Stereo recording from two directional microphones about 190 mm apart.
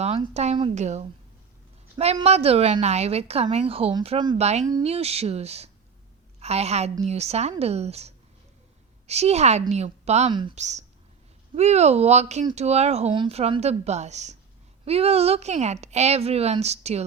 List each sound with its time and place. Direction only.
0.0 s a woman's voice: 35° right (ahead or behind)
2.2 s a woman's voice: 30° right (ahead or behind)